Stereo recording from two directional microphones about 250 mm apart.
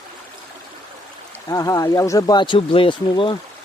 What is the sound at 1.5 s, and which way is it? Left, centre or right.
Speech, centre.